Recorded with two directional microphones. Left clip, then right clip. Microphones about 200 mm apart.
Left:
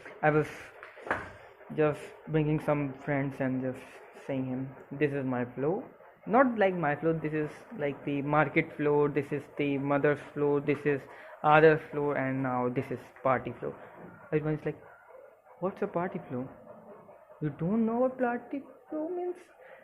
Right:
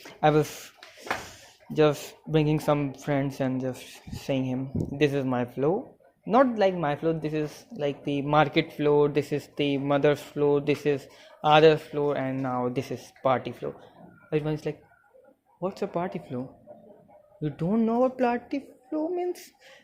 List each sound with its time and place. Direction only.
0.0 s a sound: 25° right (ahead or behind)
1.7 s speech: 35° right (ahead or behind)
4.3 s a woman's voice: 40° right (ahead or behind)
6.2 s speech: 25° right (ahead or behind)
17.4 s a woman's voice: 25° right (ahead or behind)